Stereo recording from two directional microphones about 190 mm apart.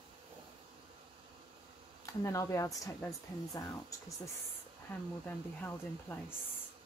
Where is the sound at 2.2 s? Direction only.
15° left (ahead or behind).